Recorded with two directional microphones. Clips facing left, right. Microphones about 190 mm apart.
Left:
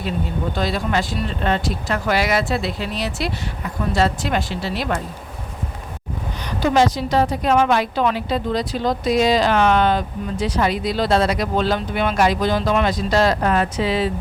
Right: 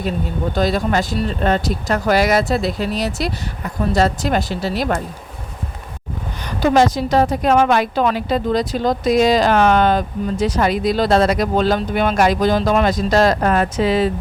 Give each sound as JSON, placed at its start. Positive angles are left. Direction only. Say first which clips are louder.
{"t": 0.5, "sound": "a woman's voice", "louder": "right 5 dB", "side_deg": -40}
{"t": 6.6, "sound": "a woman's voice", "louder": "right 3 dB", "side_deg": -45}